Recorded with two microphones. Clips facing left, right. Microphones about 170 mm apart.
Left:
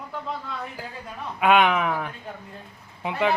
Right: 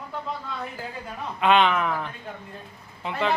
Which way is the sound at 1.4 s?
10° left (ahead or behind).